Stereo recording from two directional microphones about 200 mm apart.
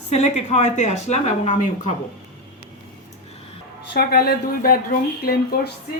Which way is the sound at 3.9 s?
50° left (ahead or behind).